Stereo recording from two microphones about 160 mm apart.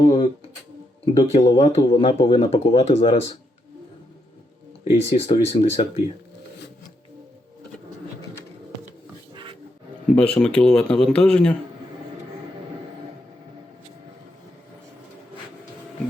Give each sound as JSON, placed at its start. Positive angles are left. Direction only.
{"t": 0.0, "sound": "a sound", "side_deg": 35}
{"t": 1.0, "sound": "speech", "side_deg": 35}
{"t": 5.3, "sound": "speech", "side_deg": 30}
{"t": 9.3, "sound": "roaring cats", "side_deg": -30}
{"t": 10.1, "sound": "speech", "side_deg": 5}